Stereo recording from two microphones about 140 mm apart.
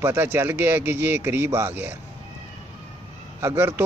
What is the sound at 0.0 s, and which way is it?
A man's voice, 15° right (ahead or behind).